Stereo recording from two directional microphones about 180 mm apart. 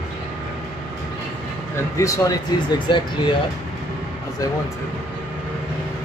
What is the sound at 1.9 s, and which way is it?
Speech, 15° left (ahead or behind).